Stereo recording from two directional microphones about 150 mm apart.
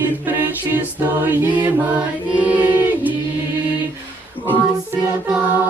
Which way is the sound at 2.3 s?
10° right (ahead or behind).